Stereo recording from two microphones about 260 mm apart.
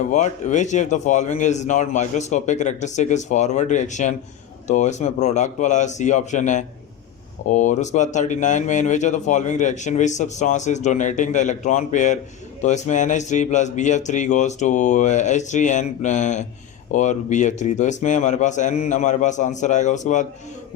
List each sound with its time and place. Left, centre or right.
0.1 s speech: left